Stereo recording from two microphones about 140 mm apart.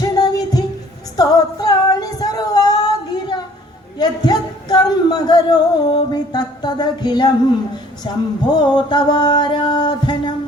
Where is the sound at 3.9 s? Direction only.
30° left (ahead or behind).